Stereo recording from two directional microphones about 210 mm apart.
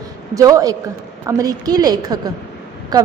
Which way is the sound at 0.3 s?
15° right (ahead or behind).